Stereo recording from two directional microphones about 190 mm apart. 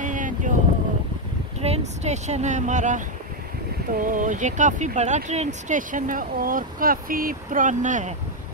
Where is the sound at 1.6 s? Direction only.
35° right (ahead or behind).